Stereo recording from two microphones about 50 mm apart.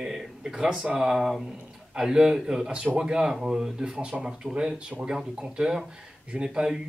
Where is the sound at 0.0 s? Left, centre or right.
Centre.